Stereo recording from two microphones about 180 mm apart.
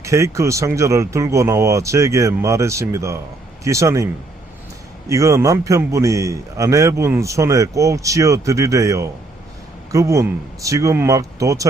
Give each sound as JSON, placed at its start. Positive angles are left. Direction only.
{"t": 0.0, "sound": "a man's voice", "side_deg": -15}